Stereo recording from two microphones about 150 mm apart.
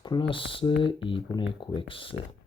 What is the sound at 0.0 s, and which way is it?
Speech, 30° left (ahead or behind).